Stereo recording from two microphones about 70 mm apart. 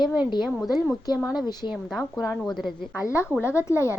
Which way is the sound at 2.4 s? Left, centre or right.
Centre.